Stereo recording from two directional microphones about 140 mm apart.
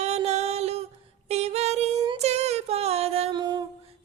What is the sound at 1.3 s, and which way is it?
Female singing, 50° right (ahead or behind).